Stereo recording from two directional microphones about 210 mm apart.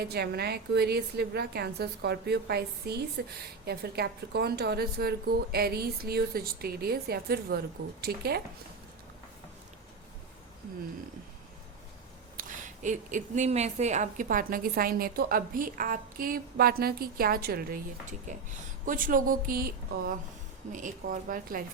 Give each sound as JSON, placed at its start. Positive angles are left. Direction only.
{"t": 0.0, "sound": "a woman's voice", "side_deg": -50}
{"t": 12.4, "sound": "a woman's voice", "side_deg": -35}